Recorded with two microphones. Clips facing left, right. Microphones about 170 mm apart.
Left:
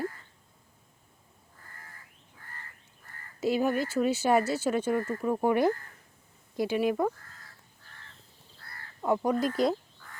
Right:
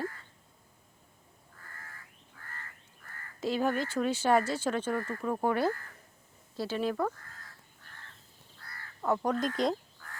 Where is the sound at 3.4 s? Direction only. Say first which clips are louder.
Left 3 dB; 10° left (ahead or behind).